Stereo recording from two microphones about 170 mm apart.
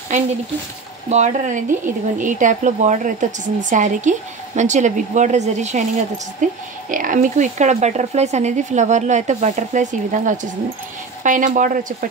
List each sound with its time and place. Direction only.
1.0 s speech: 45° right (ahead or behind)